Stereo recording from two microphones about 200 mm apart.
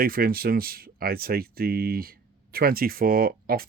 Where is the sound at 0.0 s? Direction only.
45° right (ahead or behind).